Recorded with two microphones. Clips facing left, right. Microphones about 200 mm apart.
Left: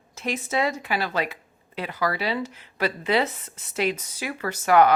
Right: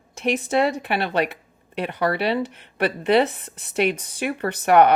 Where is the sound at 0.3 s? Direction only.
65° right (ahead or behind).